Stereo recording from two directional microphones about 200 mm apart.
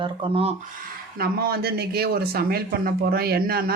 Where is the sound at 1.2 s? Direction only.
50° right (ahead or behind).